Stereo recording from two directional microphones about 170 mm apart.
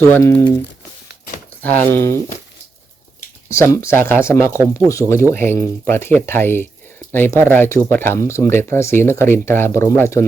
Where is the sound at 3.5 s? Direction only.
15° left (ahead or behind).